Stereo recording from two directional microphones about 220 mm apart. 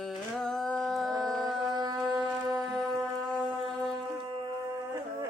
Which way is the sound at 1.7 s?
20° right (ahead or behind).